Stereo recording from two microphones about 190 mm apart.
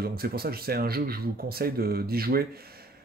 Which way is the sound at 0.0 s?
55° right (ahead or behind).